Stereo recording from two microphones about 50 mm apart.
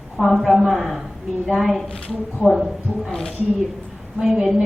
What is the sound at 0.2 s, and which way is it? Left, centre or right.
Speech, centre.